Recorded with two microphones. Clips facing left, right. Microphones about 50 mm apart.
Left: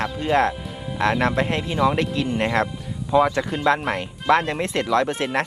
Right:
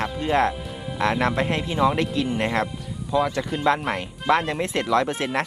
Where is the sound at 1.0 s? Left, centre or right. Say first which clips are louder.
Left 2 dB; left.